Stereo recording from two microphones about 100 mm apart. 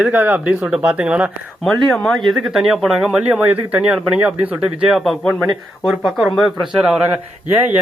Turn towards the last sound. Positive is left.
turn(degrees=-20)  # may be behind; listen again after turning